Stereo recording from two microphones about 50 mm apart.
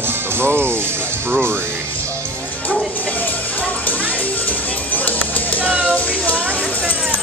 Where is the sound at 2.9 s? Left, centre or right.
Left.